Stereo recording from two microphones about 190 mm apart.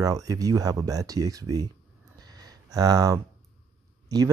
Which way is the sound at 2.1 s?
20° right (ahead or behind).